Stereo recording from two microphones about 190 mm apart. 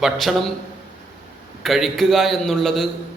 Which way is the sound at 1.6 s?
Centre (ahead or behind).